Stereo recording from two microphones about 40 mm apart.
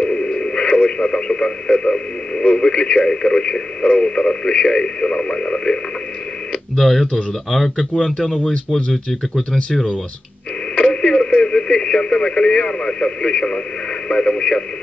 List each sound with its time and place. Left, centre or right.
0.0 s speech: left
6.8 s speech: centre
7.7 s a man's voice: left
10.8 s radio: centre
11.4 s a man's voice: centre